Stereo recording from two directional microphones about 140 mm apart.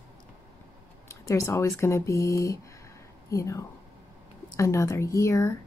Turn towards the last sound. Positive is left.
turn(degrees=20)  # may be behind; listen again after turning